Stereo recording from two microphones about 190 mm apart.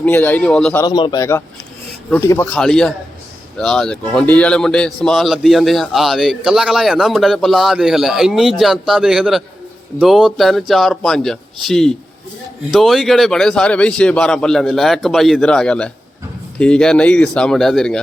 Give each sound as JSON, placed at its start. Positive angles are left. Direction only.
{"t": 0.0, "sound": "a man's voice", "side_deg": 10}
{"t": 0.9, "sound": "a man's voice", "side_deg": 25}